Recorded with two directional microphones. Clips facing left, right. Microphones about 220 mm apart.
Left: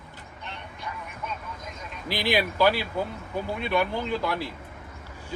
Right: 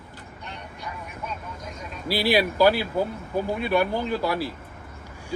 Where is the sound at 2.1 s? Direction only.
10° right (ahead or behind).